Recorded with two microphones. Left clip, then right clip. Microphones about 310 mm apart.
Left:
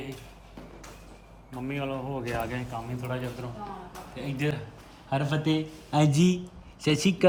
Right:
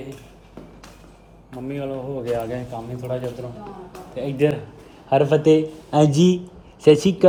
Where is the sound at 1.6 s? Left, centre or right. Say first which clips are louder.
Right 4 dB; centre.